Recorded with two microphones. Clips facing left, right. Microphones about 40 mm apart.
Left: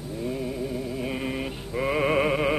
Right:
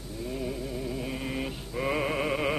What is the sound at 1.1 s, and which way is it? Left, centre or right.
Mantra, centre.